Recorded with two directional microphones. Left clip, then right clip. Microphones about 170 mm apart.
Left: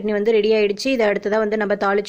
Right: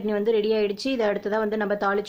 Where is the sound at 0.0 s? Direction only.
15° left (ahead or behind).